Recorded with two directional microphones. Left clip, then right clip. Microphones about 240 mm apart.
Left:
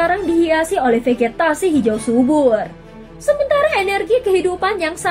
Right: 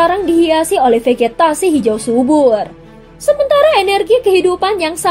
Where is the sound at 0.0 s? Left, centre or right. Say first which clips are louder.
Right 4 dB; right.